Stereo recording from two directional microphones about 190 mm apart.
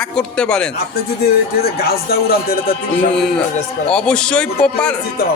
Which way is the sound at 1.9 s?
55° left (ahead or behind).